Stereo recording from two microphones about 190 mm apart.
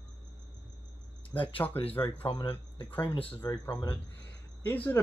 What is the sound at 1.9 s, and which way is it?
Speech, 10° left (ahead or behind).